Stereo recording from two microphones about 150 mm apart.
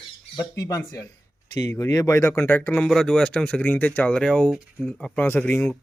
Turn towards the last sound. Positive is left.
turn(degrees=10)  # may be behind; listen again after turning